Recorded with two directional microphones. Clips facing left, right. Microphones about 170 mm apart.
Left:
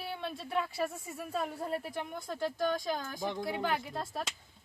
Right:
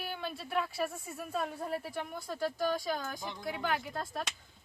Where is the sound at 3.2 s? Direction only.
50° left (ahead or behind).